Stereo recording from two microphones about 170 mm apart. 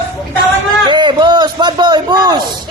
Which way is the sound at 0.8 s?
25° right (ahead or behind).